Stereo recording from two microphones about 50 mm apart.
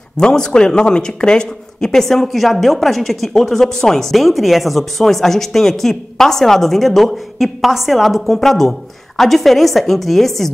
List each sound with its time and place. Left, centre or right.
0.2 s speech: centre